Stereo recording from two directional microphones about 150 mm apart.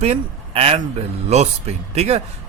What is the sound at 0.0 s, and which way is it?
Speech, 45° right (ahead or behind).